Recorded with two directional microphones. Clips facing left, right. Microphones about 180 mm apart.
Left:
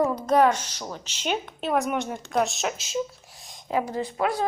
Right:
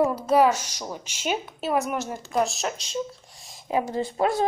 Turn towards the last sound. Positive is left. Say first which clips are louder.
# right 2 dB
turn(degrees=-30)  # may be behind; listen again after turning